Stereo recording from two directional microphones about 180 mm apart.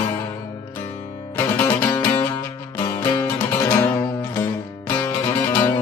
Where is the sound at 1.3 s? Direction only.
15° left (ahead or behind).